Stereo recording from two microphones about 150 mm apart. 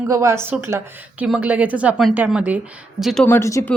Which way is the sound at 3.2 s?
15° left (ahead or behind).